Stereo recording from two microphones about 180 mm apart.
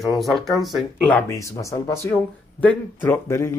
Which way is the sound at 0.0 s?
Centre (ahead or behind).